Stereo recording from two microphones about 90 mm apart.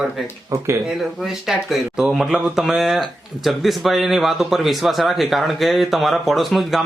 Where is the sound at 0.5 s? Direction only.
35° right (ahead or behind).